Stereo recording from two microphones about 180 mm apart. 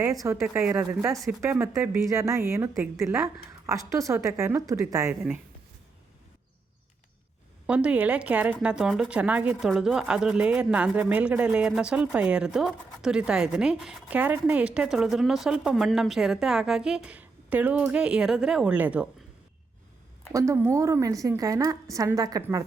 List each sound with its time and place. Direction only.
0.0 s speech: 15° right (ahead or behind)
7.7 s speech: 5° right (ahead or behind)
20.3 s a woman's voice: 15° right (ahead or behind)